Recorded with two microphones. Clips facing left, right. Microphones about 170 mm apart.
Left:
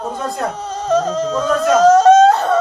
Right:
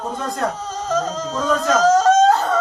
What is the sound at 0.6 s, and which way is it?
Speech, 60° left (ahead or behind).